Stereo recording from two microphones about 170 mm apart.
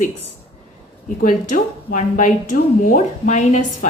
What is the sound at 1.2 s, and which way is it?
A woman's voice, 50° left (ahead or behind).